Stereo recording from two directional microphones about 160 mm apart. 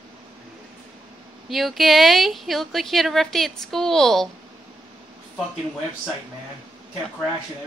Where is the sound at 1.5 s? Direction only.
Centre (ahead or behind).